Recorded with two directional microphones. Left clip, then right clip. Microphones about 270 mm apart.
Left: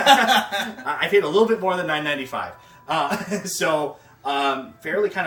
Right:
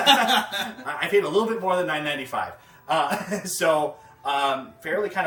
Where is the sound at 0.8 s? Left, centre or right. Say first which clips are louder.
Left 3 dB; centre.